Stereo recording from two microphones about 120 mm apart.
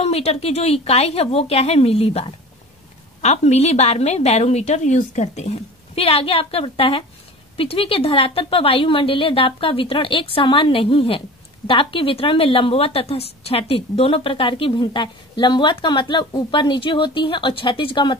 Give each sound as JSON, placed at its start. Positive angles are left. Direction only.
{"t": 0.0, "sound": "a woman's voice", "side_deg": 60}
{"t": 3.2, "sound": "a woman's voice", "side_deg": 65}